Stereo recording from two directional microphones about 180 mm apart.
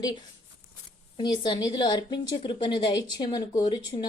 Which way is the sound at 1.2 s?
25° left (ahead or behind).